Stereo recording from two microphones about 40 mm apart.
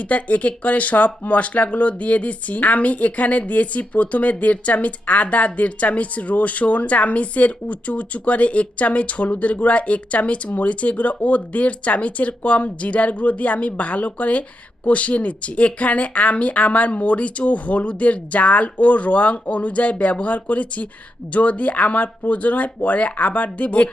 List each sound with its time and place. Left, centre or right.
0.0 s speech: left